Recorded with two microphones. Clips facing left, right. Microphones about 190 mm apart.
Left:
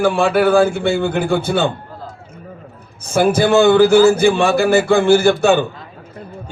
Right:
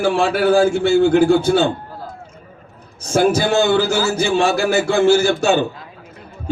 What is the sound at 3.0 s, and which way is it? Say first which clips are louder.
A man's voice: left 1 dB; 55° left (ahead or behind).